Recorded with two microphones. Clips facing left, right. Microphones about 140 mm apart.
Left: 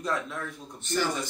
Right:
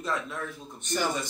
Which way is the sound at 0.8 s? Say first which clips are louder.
Left 2 dB; 15° right (ahead or behind).